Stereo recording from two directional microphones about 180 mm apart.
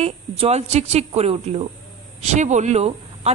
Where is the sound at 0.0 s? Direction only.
35° right (ahead or behind).